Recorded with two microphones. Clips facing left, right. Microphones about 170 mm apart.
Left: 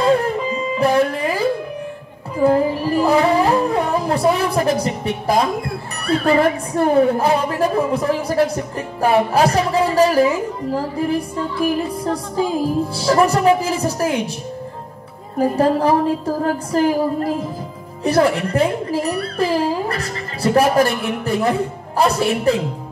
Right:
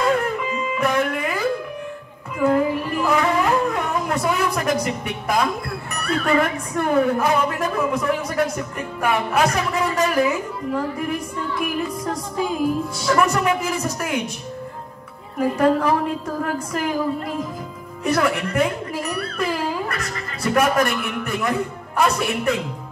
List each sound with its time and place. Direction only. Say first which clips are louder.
0.0 s music: left 4 dB; 30° left (ahead or behind)
6.0 s a woman's voice: left 5 dB; 30° left (ahead or behind)
15.3 s a woman's voice: left 2 dB; 30° left (ahead or behind)